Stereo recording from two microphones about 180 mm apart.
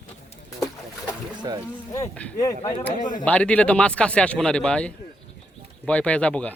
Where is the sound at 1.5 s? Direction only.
20° right (ahead or behind).